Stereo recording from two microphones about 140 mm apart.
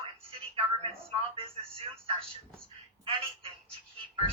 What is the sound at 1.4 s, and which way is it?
Telephone, 40° right (ahead or behind).